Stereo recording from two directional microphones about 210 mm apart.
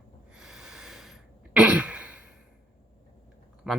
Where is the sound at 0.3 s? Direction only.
5° right (ahead or behind).